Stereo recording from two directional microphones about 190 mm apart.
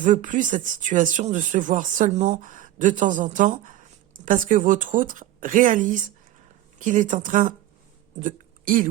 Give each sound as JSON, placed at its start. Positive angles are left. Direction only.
{"t": 0.0, "sound": "speech", "side_deg": -40}